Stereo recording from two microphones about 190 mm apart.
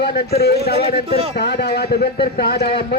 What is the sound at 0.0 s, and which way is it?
Speech, 60° left (ahead or behind).